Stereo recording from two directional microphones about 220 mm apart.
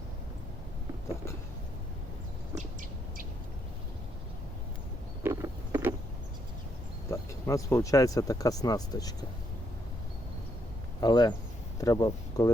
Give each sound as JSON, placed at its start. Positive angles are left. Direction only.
{"t": 5.2, "sound": "a sound", "side_deg": -15}
{"t": 7.1, "sound": "speech", "side_deg": 15}
{"t": 11.0, "sound": "speech", "side_deg": 20}